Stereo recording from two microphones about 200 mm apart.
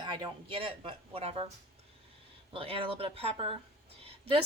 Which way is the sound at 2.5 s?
30° right (ahead or behind).